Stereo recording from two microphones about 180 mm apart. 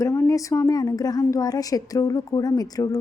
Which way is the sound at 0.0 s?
15° left (ahead or behind).